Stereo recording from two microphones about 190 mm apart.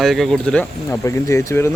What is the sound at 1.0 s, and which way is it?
Speech, 15° left (ahead or behind).